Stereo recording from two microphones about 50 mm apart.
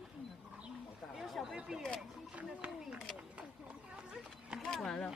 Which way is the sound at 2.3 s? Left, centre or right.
Right.